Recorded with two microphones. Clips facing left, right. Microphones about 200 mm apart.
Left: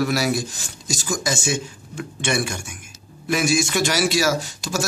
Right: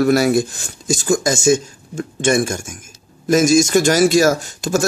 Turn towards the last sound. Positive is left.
turn(degrees=-50)  # may be behind; listen again after turning